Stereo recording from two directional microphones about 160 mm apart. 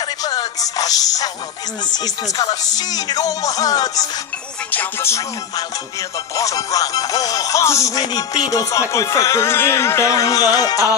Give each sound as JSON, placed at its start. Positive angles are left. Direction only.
{"t": 0.2, "sound": "music", "side_deg": 25}
{"t": 1.9, "sound": "speech", "side_deg": 25}
{"t": 4.6, "sound": "music", "side_deg": 15}
{"t": 6.3, "sound": "speech", "side_deg": 20}